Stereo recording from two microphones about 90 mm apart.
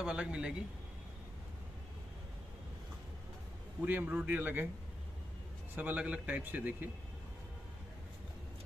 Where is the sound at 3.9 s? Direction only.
20° right (ahead or behind).